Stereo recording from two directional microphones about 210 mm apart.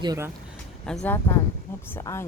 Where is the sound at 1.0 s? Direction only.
10° left (ahead or behind).